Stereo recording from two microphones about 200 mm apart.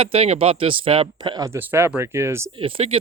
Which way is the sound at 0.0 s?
30° right (ahead or behind).